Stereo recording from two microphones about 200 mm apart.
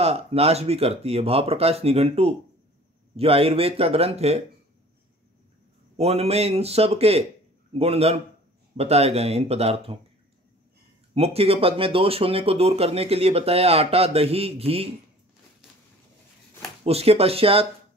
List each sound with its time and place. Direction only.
0.0 s speech: 30° right (ahead or behind)
5.9 s speech: 30° right (ahead or behind)
11.1 s speech: 30° right (ahead or behind)
16.8 s speech: 30° right (ahead or behind)